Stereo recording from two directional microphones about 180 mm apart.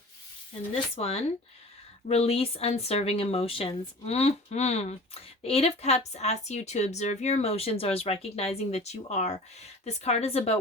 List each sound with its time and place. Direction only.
0.7 s speech: 35° left (ahead or behind)